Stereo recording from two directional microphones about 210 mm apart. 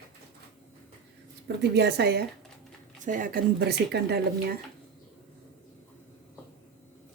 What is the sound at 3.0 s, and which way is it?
Speech, 40° right (ahead or behind).